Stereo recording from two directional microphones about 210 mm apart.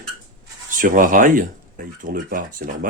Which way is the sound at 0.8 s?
40° right (ahead or behind).